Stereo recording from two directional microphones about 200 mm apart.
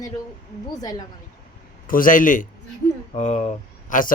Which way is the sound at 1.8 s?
45° left (ahead or behind).